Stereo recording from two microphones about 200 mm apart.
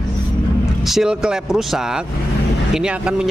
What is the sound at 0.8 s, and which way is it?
Speech, centre (ahead or behind).